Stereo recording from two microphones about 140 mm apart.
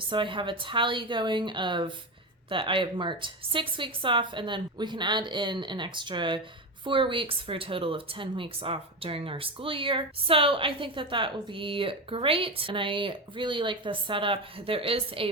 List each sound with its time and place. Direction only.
0.0 s speech: 35° right (ahead or behind)